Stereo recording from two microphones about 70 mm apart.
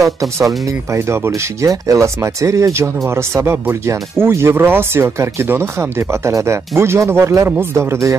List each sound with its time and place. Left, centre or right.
0.9 s speech: right